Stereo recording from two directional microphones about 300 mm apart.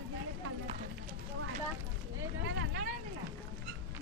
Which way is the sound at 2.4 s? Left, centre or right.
Right.